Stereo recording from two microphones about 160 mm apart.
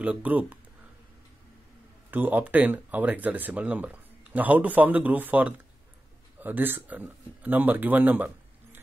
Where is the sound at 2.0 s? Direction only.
10° right (ahead or behind).